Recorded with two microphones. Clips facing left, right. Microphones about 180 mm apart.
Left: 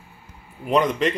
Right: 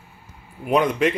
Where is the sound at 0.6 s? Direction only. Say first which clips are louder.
Right 1 dB; 5° right (ahead or behind).